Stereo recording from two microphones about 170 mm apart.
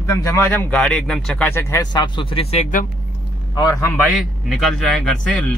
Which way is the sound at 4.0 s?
Centre (ahead or behind).